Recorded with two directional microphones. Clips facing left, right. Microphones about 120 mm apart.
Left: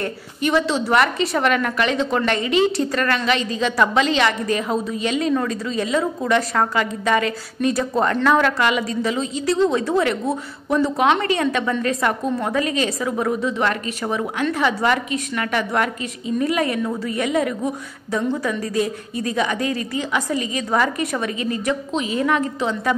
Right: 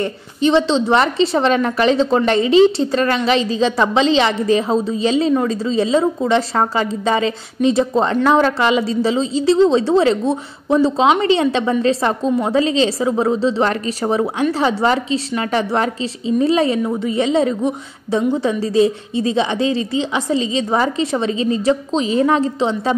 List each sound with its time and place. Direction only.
0.4 s a woman's voice: 25° right (ahead or behind)